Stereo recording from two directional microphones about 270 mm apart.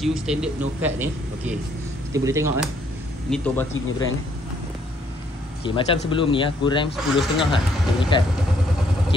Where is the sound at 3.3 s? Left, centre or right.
Centre.